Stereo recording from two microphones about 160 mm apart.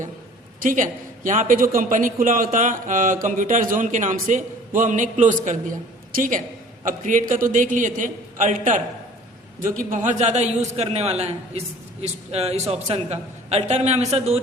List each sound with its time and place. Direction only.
0.6 s a man's voice: 55° right (ahead or behind)